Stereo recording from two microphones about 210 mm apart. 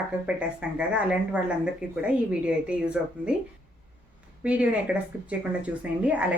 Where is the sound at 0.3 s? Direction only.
5° right (ahead or behind).